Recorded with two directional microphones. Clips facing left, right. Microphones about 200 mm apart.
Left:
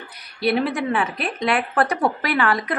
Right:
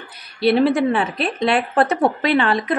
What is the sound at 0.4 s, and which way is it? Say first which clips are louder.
A woman's voice: right 6 dB; 30° right (ahead or behind).